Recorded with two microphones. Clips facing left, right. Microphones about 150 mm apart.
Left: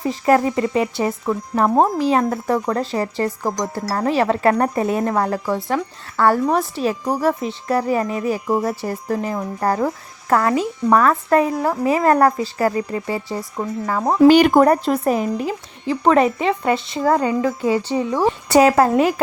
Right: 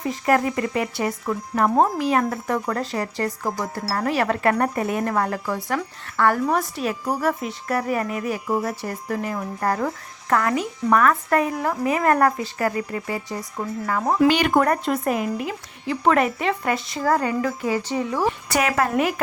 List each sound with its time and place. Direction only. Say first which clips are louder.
0.0 s speech: left 4 dB; 30° left (ahead or behind)